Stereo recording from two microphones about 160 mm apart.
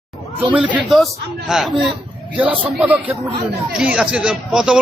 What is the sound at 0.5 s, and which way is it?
A man's voice, 10° right (ahead or behind).